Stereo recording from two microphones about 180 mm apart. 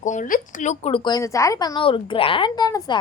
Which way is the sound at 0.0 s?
45° left (ahead or behind).